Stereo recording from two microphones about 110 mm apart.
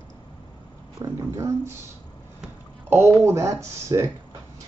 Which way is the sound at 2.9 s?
20° right (ahead or behind).